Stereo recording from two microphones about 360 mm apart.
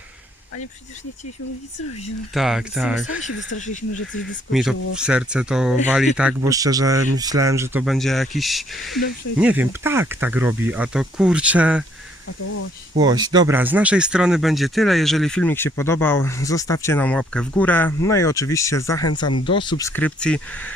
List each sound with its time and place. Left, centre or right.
2.3 s speech: centre
4.5 s speech: centre
13.0 s speech: centre